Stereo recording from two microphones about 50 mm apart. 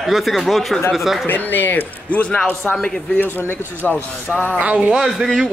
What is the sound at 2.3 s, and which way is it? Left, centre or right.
Speech, centre.